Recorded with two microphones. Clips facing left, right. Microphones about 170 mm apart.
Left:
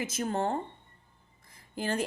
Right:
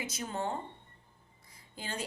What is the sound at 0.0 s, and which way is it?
Speech, 55° left (ahead or behind).